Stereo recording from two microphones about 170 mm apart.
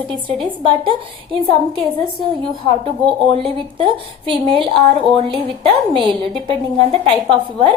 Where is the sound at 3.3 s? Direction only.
30° right (ahead or behind).